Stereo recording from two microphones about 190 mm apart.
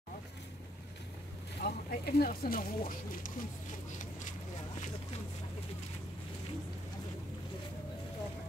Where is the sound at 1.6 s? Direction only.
55° left (ahead or behind).